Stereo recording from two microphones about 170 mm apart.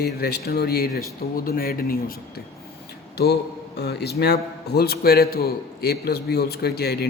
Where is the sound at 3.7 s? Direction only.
75° left (ahead or behind).